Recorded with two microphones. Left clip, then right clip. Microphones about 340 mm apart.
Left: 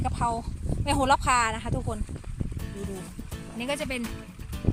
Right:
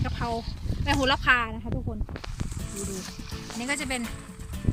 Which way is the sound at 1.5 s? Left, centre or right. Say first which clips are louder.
Left 4 dB; left.